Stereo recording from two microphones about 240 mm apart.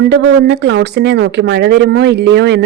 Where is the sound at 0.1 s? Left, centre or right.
Right.